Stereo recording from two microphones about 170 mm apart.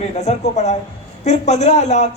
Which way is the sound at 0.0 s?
40° left (ahead or behind).